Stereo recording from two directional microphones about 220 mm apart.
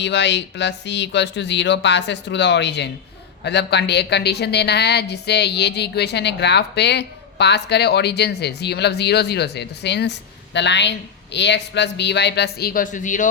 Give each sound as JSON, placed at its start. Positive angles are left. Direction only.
{"t": 0.0, "sound": "speech", "side_deg": 55}